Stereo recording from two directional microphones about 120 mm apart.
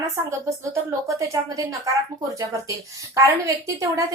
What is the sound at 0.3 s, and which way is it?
A woman's voice, 25° right (ahead or behind).